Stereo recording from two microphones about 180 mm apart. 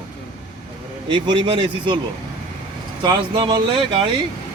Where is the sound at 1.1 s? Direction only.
25° right (ahead or behind).